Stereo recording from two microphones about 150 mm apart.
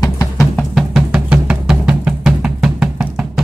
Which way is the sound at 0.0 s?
20° left (ahead or behind).